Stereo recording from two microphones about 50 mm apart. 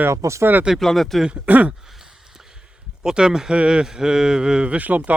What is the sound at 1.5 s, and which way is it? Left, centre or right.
Speech, right.